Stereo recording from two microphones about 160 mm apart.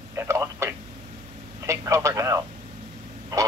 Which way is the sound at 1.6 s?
20° right (ahead or behind).